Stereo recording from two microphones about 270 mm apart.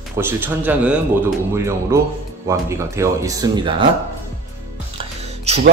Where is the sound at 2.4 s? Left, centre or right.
Centre.